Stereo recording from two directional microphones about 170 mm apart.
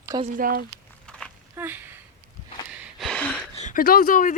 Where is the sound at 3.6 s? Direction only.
50° left (ahead or behind).